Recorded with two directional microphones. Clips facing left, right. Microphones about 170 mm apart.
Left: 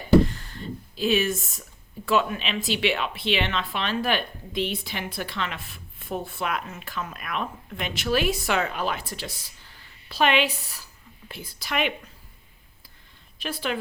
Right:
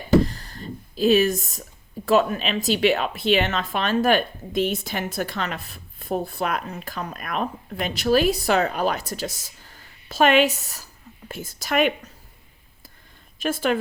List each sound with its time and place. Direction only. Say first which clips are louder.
0.3 s a sound: even; 35° right (ahead or behind)
2.0 s a woman's voice: right 4 dB; 40° right (ahead or behind)
13.4 s a woman's voice: right 7 dB; 45° right (ahead or behind)